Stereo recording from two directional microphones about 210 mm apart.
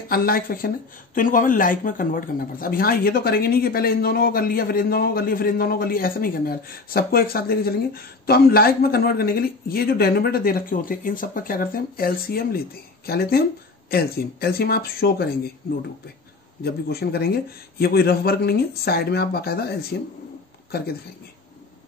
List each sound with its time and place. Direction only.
0.1 s speech: 45° left (ahead or behind)
16.6 s speech: 50° left (ahead or behind)